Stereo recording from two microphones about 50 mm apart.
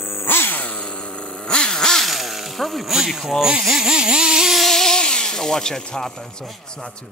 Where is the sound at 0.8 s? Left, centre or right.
Centre.